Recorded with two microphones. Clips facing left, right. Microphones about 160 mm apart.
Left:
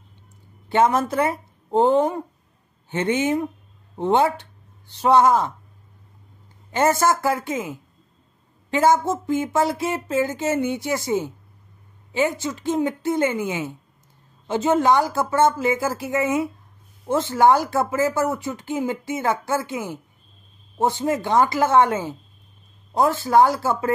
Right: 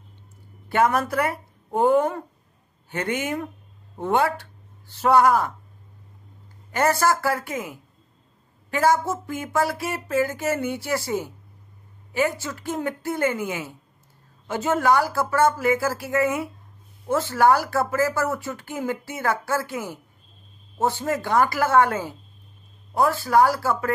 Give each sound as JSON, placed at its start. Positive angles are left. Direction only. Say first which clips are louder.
{"t": 0.7, "sound": "speech", "louder": "left 2 dB", "side_deg": 20}
{"t": 6.7, "sound": "speech", "louder": "left 2 dB", "side_deg": 20}